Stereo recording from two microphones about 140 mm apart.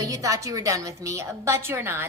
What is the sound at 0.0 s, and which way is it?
A woman's voice, 25° right (ahead or behind).